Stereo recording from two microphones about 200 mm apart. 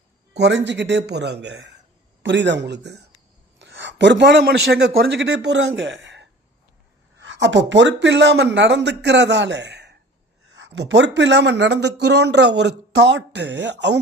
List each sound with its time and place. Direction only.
0.3 s a man's voice: 60° right (ahead or behind)